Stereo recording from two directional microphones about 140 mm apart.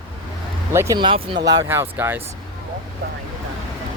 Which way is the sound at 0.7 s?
20° right (ahead or behind).